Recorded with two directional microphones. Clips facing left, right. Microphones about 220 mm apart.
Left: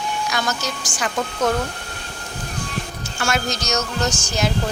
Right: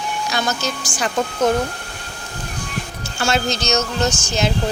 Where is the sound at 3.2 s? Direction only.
25° right (ahead or behind).